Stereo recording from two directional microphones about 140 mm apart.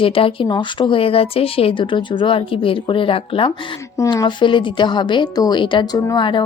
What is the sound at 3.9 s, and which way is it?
A woman's voice, 25° left (ahead or behind).